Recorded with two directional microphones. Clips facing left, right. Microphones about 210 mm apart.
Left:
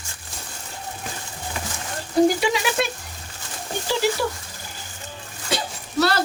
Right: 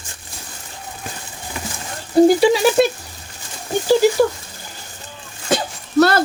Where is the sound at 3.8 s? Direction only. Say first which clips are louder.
Right 9 dB; 45° right (ahead or behind).